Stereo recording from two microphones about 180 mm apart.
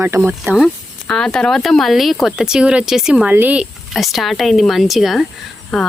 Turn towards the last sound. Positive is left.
turn(degrees=0)  # may be behind; listen again after turning